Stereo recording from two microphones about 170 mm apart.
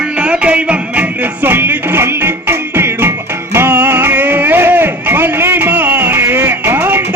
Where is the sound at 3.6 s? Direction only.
10° right (ahead or behind).